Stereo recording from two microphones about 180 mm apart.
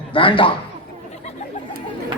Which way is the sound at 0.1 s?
30° left (ahead or behind).